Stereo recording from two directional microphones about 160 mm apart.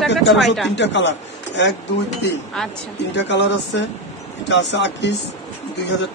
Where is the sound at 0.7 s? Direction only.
90° left.